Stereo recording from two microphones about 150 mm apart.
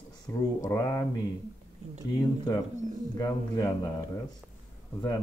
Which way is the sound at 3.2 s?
25° left (ahead or behind).